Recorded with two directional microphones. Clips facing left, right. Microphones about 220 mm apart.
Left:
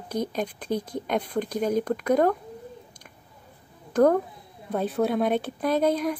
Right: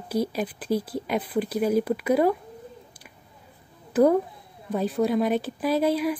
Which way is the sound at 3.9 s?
10° right (ahead or behind).